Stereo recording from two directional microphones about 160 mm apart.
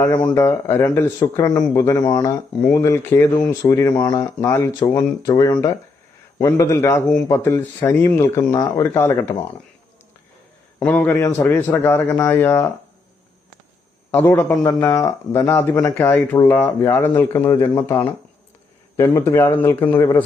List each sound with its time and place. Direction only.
0.0 s speech: 15° left (ahead or behind)
10.8 s a man's voice: 5° left (ahead or behind)
14.1 s speech: 10° left (ahead or behind)